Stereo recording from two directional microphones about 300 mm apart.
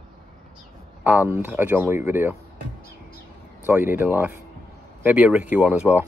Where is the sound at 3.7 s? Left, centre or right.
Centre.